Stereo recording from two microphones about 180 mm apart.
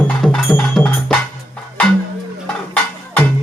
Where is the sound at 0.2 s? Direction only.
Centre (ahead or behind).